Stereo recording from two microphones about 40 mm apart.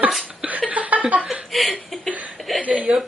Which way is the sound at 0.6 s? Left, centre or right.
Right.